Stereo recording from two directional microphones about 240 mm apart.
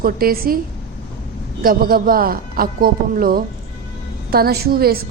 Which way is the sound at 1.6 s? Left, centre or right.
Right.